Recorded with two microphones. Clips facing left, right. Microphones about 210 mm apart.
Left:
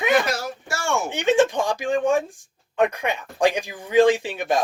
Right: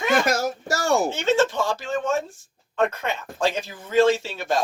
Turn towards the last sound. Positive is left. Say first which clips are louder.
# left 2 dB
turn(degrees=15)  # may be behind; listen again after turning